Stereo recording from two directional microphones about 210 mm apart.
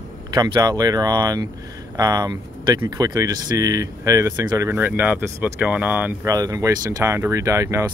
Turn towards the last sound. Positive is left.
turn(degrees=-15)  # may be behind; listen again after turning